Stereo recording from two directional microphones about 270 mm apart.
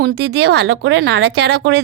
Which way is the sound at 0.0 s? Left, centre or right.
Right.